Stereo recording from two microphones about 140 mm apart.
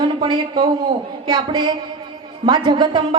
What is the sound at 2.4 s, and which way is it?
Speech, 30° right (ahead or behind).